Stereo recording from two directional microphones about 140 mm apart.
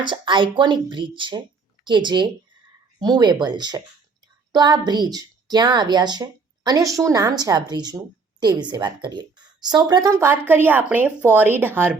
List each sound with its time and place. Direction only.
0.0 s a woman's voice: 35° right (ahead or behind); by 11.9 s 15° right (ahead or behind)